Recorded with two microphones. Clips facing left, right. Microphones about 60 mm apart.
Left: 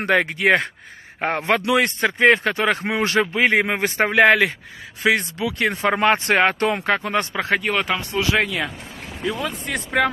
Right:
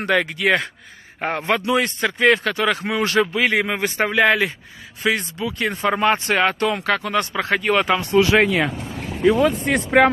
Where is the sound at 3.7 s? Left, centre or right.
Left.